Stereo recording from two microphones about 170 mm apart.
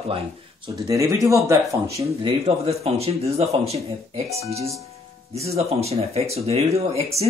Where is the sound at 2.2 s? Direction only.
35° right (ahead or behind).